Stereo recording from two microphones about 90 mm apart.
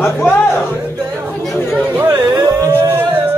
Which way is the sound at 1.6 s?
20° left (ahead or behind).